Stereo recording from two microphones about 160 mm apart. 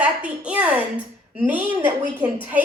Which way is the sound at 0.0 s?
10° right (ahead or behind).